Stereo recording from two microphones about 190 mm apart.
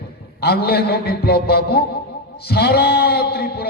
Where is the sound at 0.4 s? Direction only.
55° left (ahead or behind).